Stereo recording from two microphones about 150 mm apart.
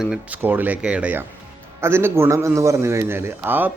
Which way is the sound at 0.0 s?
10° right (ahead or behind).